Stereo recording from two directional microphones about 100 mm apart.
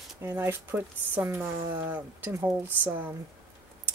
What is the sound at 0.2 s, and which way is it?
Speech, 25° right (ahead or behind).